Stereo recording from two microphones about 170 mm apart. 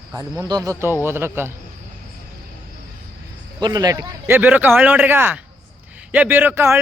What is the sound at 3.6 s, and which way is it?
Speech, 25° right (ahead or behind).